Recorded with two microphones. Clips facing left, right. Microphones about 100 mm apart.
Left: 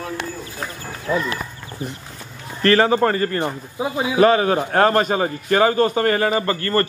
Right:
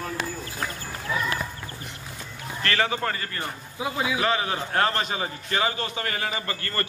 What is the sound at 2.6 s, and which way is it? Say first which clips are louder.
A man's voice: left 10 dB; 40° left (ahead or behind).